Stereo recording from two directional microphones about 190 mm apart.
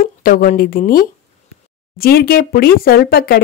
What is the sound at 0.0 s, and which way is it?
Speech, 45° left (ahead or behind).